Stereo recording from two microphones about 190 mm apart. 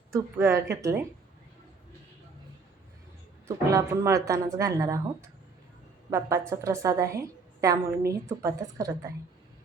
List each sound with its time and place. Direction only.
0.1 s a woman's voice: 15° right (ahead or behind)
3.4 s a woman's voice: 15° right (ahead or behind)
6.1 s a woman's voice: 15° right (ahead or behind)